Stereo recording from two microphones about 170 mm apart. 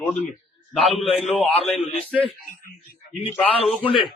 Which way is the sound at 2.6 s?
55° left (ahead or behind).